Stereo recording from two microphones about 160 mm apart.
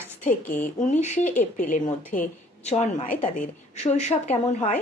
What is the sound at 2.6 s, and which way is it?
A woman's voice, 40° left (ahead or behind).